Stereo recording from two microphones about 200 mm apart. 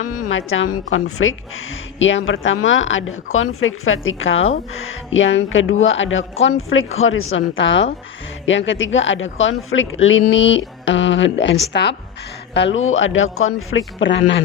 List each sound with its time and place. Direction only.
0.3 s a woman's voice: 75° left (ahead or behind)
2.0 s a woman's voice: 70° left (ahead or behind)
3.3 s a woman's voice: 85° left; by 11.9 s 60° left (ahead or behind)
12.5 s a woman's voice: 70° left (ahead or behind)
13.7 s speech: 70° left (ahead or behind)